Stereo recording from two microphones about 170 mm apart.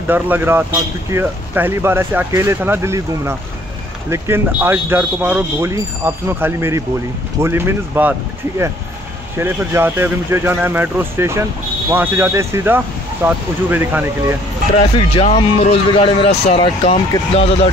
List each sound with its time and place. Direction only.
0.1 s speech: 10° right (ahead or behind)
15.0 s speech: 30° left (ahead or behind)